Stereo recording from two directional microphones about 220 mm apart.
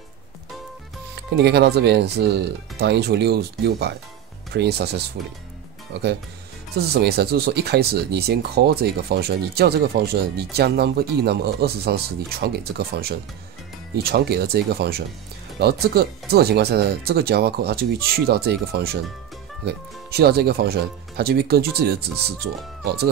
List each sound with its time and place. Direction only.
1.3 s speech: 50° right (ahead or behind)
6.7 s speech: 45° right (ahead or behind)
20.2 s speech: 45° right (ahead or behind)